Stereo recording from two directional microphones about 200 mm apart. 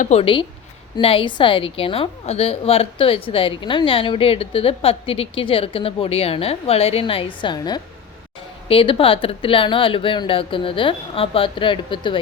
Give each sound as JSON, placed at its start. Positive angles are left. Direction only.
{"t": 0.0, "sound": "a woman's voice", "side_deg": 30}